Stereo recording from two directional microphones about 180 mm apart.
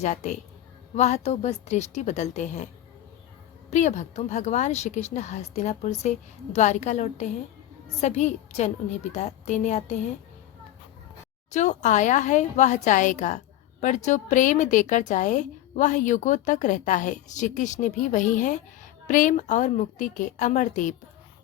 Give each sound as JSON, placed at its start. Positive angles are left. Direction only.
{"t": 0.0, "sound": "a woman's voice", "side_deg": 40}
{"t": 3.7, "sound": "a woman's voice", "side_deg": 40}
{"t": 11.5, "sound": "a woman's voice", "side_deg": 40}